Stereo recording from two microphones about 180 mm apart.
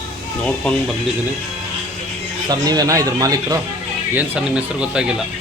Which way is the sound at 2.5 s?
20° right (ahead or behind).